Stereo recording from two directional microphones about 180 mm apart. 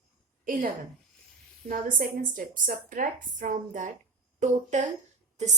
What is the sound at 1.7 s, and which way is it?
A woman's voice, 50° right (ahead or behind).